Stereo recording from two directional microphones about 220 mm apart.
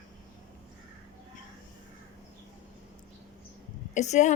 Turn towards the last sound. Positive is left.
turn(degrees=30)  # may be behind; listen again after turning